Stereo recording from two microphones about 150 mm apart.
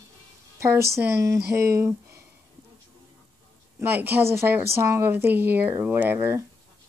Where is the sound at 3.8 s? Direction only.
15° right (ahead or behind).